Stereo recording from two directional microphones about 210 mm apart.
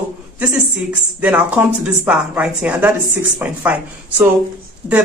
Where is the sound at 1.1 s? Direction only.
5° right (ahead or behind).